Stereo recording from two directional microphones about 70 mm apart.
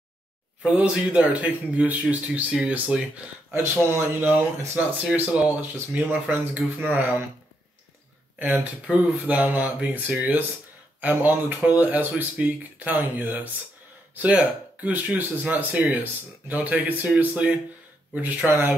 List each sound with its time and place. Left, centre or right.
0.7 s speech: centre
3.8 s speech: right
8.4 s speech: right